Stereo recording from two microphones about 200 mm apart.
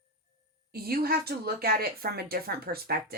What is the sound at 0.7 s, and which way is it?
Speech, 50° right (ahead or behind).